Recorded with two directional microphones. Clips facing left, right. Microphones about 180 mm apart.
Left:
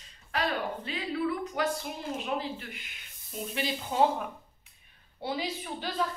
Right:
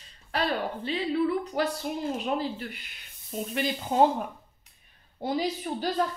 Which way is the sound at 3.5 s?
45° right (ahead or behind).